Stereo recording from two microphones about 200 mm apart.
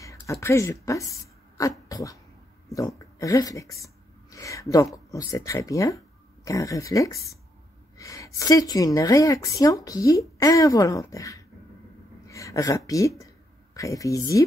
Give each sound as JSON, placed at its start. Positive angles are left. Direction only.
{"t": 0.0, "sound": "speech", "side_deg": 15}
{"t": 3.2, "sound": "a woman's voice", "side_deg": 15}